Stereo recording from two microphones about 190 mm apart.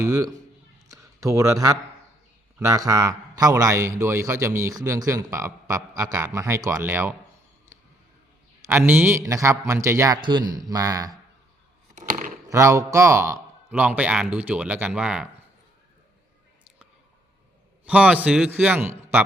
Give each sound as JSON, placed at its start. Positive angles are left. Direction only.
{"t": 0.0, "sound": "a man's voice", "side_deg": -20}
{"t": 0.9, "sound": "a sound", "side_deg": -15}
{"t": 2.6, "sound": "a man's voice", "side_deg": -15}
{"t": 8.6, "sound": "a man's voice", "side_deg": -5}
{"t": 11.9, "sound": "a sound", "side_deg": -45}
{"t": 12.5, "sound": "a man's voice", "side_deg": -15}
{"t": 17.8, "sound": "a man's voice", "side_deg": -5}